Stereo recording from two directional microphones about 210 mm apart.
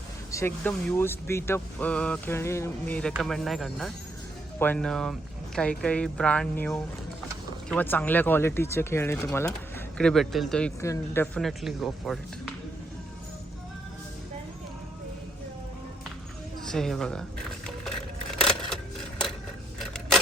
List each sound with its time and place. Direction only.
0.3 s speech: 10° left (ahead or behind)
10.8 s speech: 10° left (ahead or behind)
11.3 s speech: centre (ahead or behind)
16.7 s speech: centre (ahead or behind)
17.8 s a sound: centre (ahead or behind)
19.8 s a sound: centre (ahead or behind)